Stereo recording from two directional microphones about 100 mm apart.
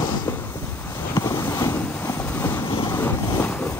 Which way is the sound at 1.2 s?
30° left (ahead or behind).